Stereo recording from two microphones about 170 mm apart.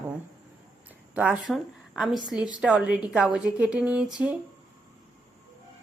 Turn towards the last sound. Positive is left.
turn(degrees=-5)  # may be behind; listen again after turning